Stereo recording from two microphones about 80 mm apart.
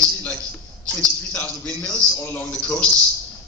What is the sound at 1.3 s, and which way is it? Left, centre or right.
A man's voice, centre.